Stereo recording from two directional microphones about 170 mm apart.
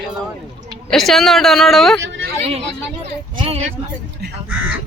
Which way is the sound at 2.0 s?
90° right.